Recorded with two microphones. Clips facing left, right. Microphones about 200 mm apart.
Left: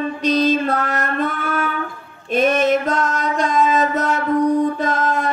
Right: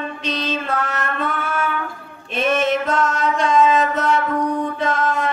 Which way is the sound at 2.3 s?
40° left (ahead or behind).